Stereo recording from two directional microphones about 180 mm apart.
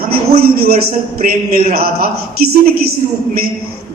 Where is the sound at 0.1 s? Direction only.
60° right (ahead or behind).